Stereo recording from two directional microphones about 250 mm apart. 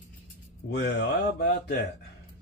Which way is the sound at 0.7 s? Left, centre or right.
Left.